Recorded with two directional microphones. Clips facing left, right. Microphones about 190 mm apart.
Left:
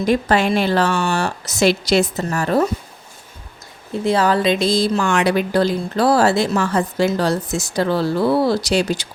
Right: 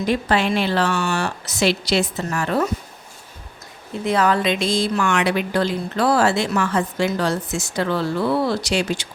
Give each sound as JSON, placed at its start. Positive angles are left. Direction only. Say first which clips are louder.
{"t": 0.0, "sound": "a woman's voice", "louder": "left 3 dB", "side_deg": 45}
{"t": 4.0, "sound": "a woman's voice", "louder": "left 2 dB", "side_deg": 30}